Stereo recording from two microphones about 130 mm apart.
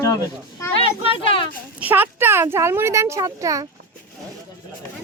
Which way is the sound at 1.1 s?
45° left (ahead or behind).